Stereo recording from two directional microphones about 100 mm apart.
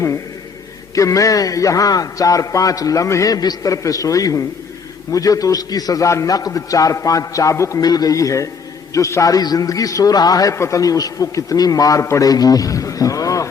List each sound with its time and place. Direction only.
0.9 s a man's voice: 35° left (ahead or behind)